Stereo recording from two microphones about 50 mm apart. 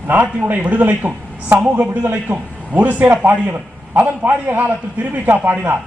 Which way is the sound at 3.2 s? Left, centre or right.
Right.